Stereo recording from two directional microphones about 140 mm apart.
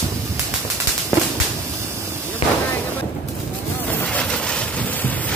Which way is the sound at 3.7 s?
15° left (ahead or behind).